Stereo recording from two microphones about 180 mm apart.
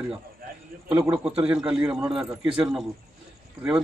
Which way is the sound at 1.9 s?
20° right (ahead or behind).